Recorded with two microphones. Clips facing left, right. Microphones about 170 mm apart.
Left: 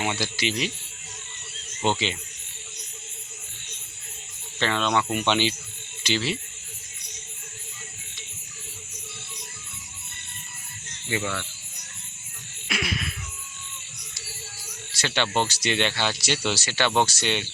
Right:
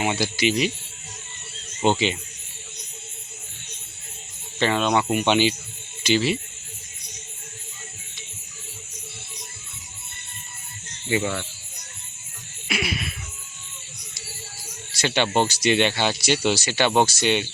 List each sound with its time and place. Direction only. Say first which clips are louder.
0.0 s speech: right 5 dB; 15° right (ahead or behind)
1.8 s speech: right 5 dB; 15° right (ahead or behind)
4.6 s speech: right 3 dB; 15° right (ahead or behind)
11.1 s speech: right 5 dB; 25° right (ahead or behind)
12.6 s music: right 3 dB; 5° right (ahead or behind)
14.9 s speech: right 4 dB; 15° right (ahead or behind)